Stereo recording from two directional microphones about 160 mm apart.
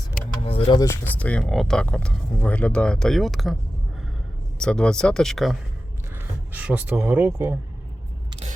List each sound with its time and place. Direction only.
0.4 s a sound: 35° left (ahead or behind)
1.2 s speech: 5° left (ahead or behind)
4.6 s speech: 5° left (ahead or behind)
6.1 s speech: 10° right (ahead or behind)